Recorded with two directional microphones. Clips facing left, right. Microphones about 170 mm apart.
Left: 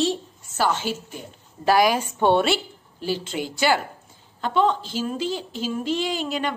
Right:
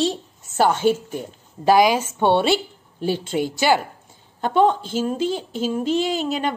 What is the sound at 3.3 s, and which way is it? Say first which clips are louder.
Speech: right 6 dB; 30° right (ahead or behind).